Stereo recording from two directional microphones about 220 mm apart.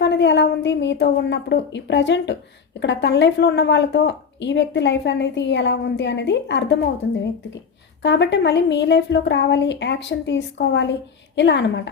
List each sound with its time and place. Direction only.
0.0 s speech: 55° left (ahead or behind)
8.0 s speech: 55° left (ahead or behind)